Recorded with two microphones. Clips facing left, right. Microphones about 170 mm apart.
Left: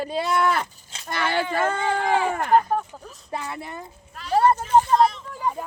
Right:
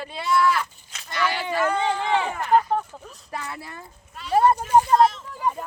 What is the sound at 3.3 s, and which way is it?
Speech, 20° left (ahead or behind).